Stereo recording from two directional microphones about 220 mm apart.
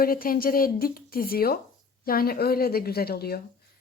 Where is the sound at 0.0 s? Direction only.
40° left (ahead or behind).